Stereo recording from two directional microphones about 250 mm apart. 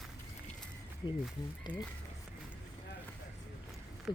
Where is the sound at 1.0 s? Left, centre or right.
Centre.